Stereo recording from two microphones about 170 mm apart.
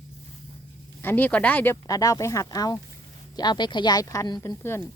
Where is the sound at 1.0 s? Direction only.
10° left (ahead or behind).